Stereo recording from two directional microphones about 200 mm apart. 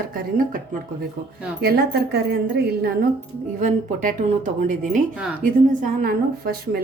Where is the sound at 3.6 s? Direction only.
40° right (ahead or behind).